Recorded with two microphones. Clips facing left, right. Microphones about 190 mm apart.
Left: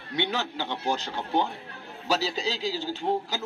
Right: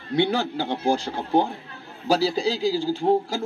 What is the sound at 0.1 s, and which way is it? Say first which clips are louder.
A man's voice: right 7 dB; 45° right (ahead or behind).